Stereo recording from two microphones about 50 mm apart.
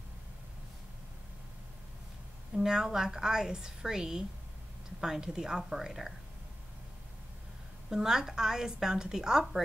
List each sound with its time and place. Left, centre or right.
2.5 s a woman's voice: centre
7.9 s a woman's voice: centre